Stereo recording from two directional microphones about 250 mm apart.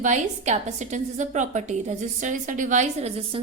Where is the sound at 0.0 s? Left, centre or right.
Right.